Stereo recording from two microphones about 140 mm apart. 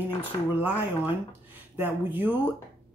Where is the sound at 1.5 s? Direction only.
15° right (ahead or behind).